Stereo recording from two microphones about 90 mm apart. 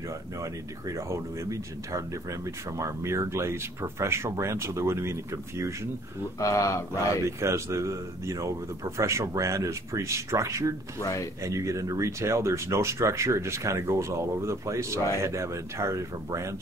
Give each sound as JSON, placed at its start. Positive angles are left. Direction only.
{"t": 0.4, "sound": "speech", "side_deg": -35}
{"t": 6.4, "sound": "speech", "side_deg": 35}
{"t": 7.2, "sound": "speech", "side_deg": -30}